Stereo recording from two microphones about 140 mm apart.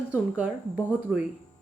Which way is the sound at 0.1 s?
10° right (ahead or behind).